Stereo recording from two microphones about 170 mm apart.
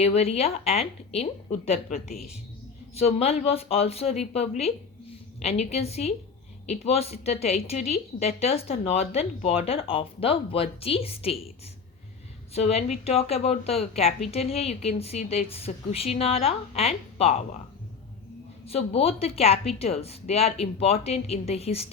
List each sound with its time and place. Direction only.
0.0 s a woman's voice: 40° left (ahead or behind)
2.9 s a woman's voice: 35° left (ahead or behind)
12.5 s a woman's voice: 40° left (ahead or behind)
18.6 s a woman's voice: 35° left (ahead or behind)